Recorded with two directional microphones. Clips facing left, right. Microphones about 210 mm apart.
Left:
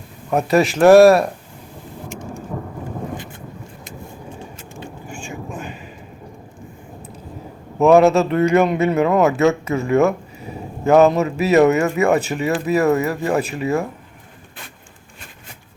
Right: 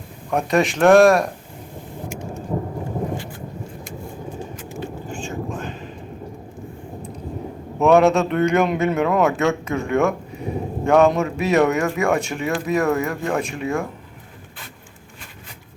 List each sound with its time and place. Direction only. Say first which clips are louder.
0.3 s a man's voice: left 3 dB; 5° left (ahead or behind)
2.5 s thunder: right 5 dB; 25° right (ahead or behind)
5.0 s vehicle: right 3 dB; 15° left (ahead or behind)
7.8 s a man's voice: left 3 dB; centre (ahead or behind)